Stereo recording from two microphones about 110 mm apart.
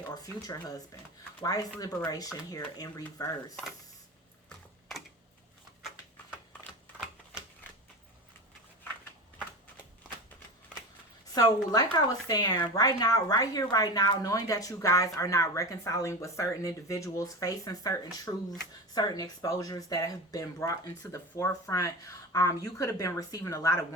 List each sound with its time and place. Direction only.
0.1 s a woman's voice: 35° left (ahead or behind)
3.5 s speech: centre (ahead or behind)
4.4 s typing: centre (ahead or behind)
11.3 s a woman's voice: 35° left (ahead or behind)